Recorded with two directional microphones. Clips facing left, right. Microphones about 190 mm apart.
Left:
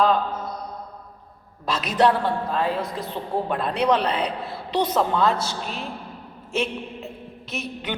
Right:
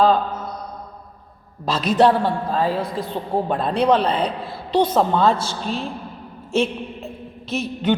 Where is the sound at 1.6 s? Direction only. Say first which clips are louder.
Right 4 dB; 30° right (ahead or behind).